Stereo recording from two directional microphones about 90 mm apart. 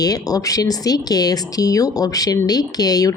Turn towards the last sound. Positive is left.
turn(degrees=45)  # may be behind; listen again after turning